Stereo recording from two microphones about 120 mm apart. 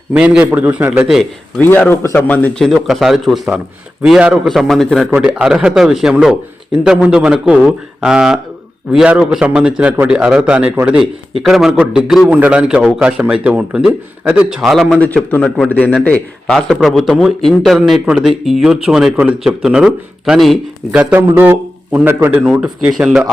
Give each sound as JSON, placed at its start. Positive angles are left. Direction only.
{"t": 0.1, "sound": "a man's voice", "side_deg": -10}
{"t": 1.0, "sound": "a man's voice", "side_deg": 0}
{"t": 1.6, "sound": "speech", "side_deg": 15}
{"t": 2.6, "sound": "a man's voice", "side_deg": 0}
{"t": 15.0, "sound": "a man's voice", "side_deg": 10}